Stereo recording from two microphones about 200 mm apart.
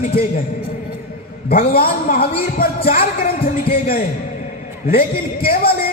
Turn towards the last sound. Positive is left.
turn(degrees=50)  # may be behind; listen again after turning